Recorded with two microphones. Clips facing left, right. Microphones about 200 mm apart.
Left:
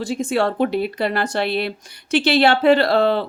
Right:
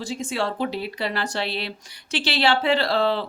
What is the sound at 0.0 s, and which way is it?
A woman's voice, 55° left (ahead or behind).